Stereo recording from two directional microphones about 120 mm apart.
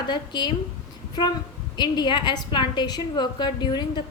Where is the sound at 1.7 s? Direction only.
35° left (ahead or behind).